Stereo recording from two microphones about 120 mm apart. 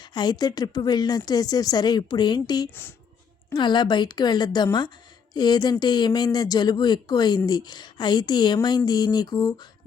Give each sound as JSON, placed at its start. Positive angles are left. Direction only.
{"t": 0.0, "sound": "speech", "side_deg": 35}